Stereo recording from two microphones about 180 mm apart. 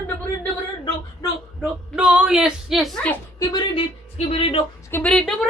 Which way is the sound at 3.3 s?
25° left (ahead or behind).